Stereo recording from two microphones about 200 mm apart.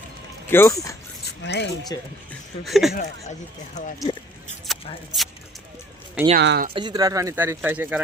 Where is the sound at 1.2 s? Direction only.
55° left (ahead or behind).